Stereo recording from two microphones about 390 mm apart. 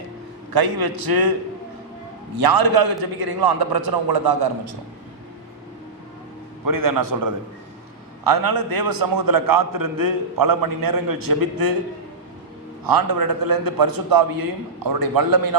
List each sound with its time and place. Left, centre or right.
0.5 s a man's voice: right
2.4 s a man's voice: right
6.7 s a man's voice: right
12.8 s a man's voice: right